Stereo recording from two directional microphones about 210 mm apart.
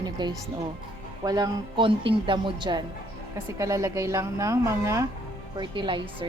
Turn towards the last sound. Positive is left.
turn(degrees=-25)  # may be behind; listen again after turning